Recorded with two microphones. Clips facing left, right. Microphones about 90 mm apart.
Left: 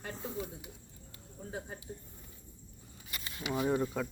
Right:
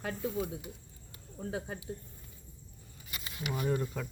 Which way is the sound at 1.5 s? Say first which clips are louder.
Right 5 dB; 90° right.